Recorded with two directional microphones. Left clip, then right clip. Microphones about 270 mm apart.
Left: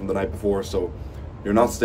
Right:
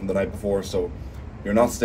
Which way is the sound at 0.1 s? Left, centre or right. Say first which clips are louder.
Even; centre.